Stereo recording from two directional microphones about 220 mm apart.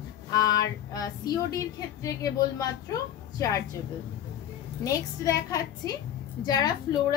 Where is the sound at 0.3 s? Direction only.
15° left (ahead or behind).